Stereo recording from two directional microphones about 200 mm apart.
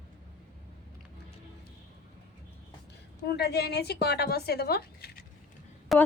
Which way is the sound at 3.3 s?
55° left (ahead or behind).